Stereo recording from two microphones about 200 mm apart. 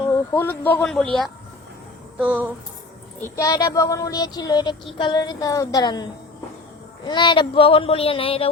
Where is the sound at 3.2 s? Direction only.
15° left (ahead or behind).